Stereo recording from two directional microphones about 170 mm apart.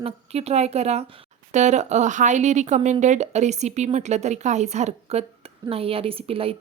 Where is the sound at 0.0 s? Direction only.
40° right (ahead or behind).